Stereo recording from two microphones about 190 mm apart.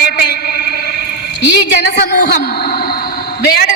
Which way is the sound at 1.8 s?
55° left (ahead or behind).